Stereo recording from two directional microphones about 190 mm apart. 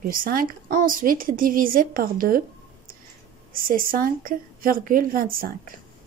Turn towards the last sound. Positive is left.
turn(degrees=-50)  # may be behind; listen again after turning